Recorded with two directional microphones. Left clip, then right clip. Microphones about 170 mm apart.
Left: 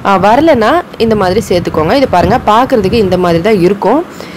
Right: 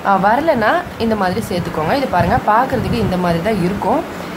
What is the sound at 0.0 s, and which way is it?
Speech, 40° left (ahead or behind).